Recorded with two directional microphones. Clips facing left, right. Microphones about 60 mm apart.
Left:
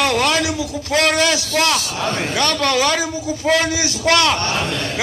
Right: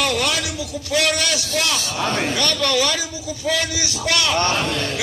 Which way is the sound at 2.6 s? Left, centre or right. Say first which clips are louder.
Left 3 dB; left.